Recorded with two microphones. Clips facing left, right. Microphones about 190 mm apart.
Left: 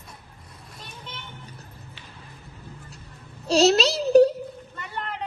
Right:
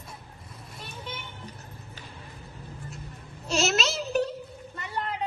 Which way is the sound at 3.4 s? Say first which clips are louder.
Left 8 dB; 35° left (ahead or behind).